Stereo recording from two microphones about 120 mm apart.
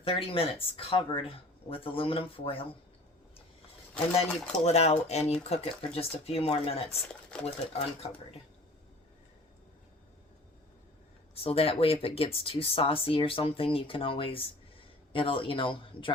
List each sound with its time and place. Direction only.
0.0 s speech: 50° left (ahead or behind)
4.2 s speech: 65° left (ahead or behind)
11.4 s speech: 50° left (ahead or behind)